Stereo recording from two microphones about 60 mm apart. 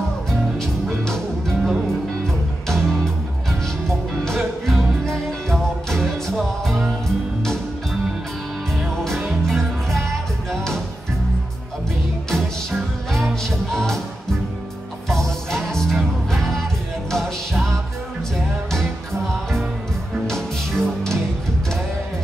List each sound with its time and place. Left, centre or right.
1.0 s music: centre
4.2 s music: centre
8.8 s music: centre
12.3 s music: centre
15.0 s music: centre